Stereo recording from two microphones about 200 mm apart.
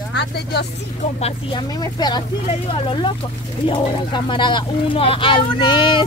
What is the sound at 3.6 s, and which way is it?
Speech, 25° left (ahead or behind).